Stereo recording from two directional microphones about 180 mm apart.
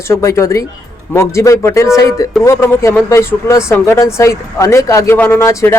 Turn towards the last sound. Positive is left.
turn(degrees=15)  # may be behind; listen again after turning